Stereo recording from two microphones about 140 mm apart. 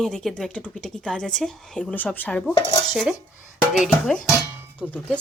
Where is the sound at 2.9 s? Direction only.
5° right (ahead or behind).